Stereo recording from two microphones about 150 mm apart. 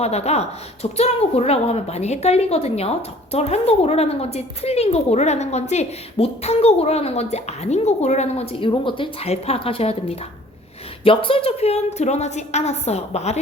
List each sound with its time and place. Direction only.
0.0 s a woman's voice: 45° left (ahead or behind)
8.6 s a woman's voice: 35° left (ahead or behind)